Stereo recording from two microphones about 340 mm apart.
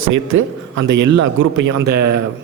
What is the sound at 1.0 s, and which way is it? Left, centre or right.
Speech, right.